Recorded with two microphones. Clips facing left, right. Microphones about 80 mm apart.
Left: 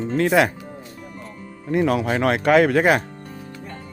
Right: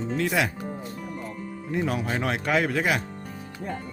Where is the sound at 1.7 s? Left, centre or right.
Left.